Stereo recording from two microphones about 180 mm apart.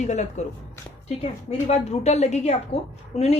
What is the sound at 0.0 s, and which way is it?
A woman's voice, 40° left (ahead or behind).